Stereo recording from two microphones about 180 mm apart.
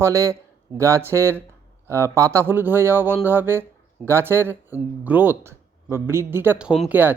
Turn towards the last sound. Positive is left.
turn(degrees=-10)  # may be behind; listen again after turning